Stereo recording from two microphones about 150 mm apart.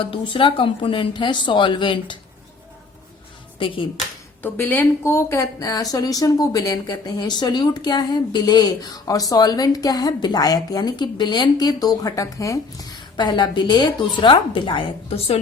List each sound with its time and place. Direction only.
0.0 s a woman's voice: 35° left (ahead or behind)
3.6 s a woman's voice: 35° left (ahead or behind)
4.4 s a woman's voice: 10° left (ahead or behind); by 15.4 s 40° left (ahead or behind)